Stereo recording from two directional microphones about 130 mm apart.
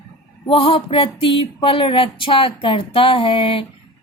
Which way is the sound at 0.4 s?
45° left (ahead or behind).